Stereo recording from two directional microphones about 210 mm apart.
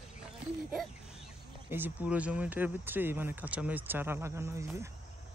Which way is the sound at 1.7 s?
10° right (ahead or behind).